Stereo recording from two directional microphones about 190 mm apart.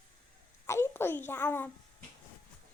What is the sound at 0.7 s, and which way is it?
A child's voice, 15° left (ahead or behind).